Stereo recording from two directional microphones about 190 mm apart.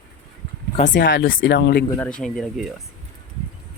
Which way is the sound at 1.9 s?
5° left (ahead or behind).